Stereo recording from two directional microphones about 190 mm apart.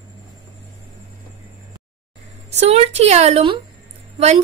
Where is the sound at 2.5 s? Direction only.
35° right (ahead or behind).